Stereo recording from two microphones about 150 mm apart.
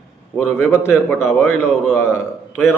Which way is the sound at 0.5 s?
15° left (ahead or behind).